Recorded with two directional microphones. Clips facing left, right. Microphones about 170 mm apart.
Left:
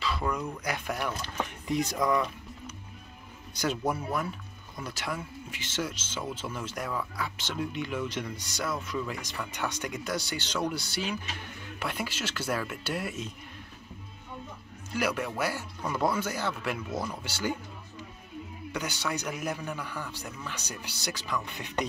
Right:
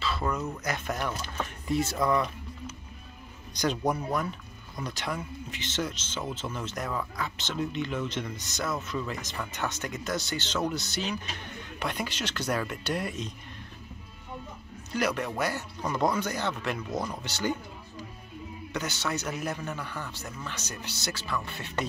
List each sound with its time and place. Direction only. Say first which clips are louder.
0.2 s a man's voice: right 1 dB; 5° right (ahead or behind)
0.7 s speech: even; 10° left (ahead or behind)
3.5 s a man's voice: right 2 dB; 5° left (ahead or behind)
15.0 s speech: right 1 dB; 10° left (ahead or behind)
18.7 s speech: right 1 dB; 10° left (ahead or behind)